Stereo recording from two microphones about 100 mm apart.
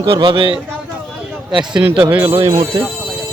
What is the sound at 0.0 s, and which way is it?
Speech, 50° right (ahead or behind).